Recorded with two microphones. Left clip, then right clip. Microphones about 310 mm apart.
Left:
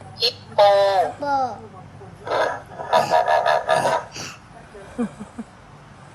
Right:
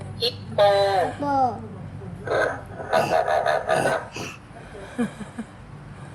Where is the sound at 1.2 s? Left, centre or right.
Right.